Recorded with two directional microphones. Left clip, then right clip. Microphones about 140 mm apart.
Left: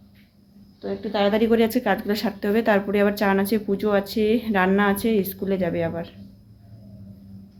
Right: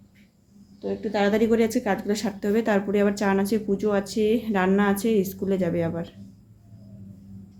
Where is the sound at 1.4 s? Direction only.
5° right (ahead or behind).